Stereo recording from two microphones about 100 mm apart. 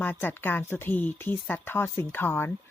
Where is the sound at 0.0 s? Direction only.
20° left (ahead or behind).